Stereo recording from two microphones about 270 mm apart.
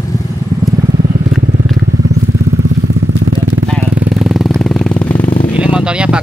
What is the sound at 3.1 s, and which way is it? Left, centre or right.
Vehicle, right.